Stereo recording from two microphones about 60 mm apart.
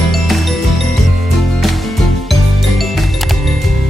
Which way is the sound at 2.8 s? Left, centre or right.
Centre.